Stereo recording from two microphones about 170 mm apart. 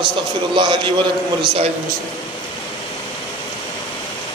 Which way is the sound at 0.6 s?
30° right (ahead or behind).